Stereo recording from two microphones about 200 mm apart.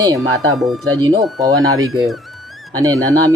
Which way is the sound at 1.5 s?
90° right.